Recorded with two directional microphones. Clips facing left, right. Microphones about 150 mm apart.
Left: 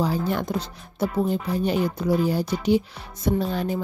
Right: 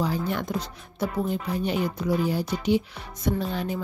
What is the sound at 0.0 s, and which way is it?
Speech, 35° left (ahead or behind).